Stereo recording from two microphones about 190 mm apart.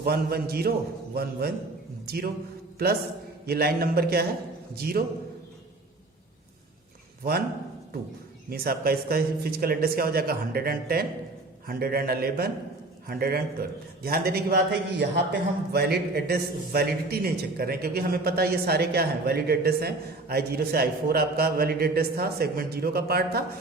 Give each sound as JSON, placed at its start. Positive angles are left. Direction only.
{"t": 0.0, "sound": "a man's voice", "side_deg": -55}
{"t": 8.4, "sound": "a man's voice", "side_deg": -55}